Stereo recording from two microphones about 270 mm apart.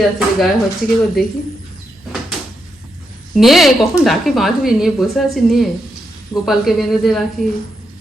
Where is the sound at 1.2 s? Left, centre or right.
Centre.